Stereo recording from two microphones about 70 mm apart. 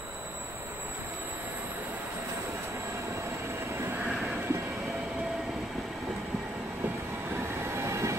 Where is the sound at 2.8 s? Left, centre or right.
Right.